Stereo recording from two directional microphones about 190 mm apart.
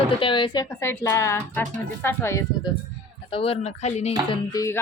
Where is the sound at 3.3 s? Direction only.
30° left (ahead or behind).